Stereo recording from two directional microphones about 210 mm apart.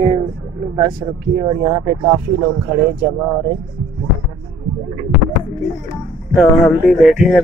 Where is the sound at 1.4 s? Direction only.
15° right (ahead or behind).